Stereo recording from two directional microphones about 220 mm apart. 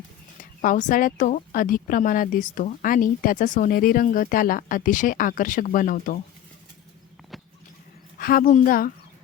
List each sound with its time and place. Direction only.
0.6 s a woman's voice: 35° left (ahead or behind)
8.2 s a woman's voice: 40° left (ahead or behind)